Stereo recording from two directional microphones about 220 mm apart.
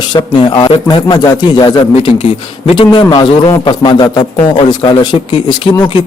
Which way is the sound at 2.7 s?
20° left (ahead or behind).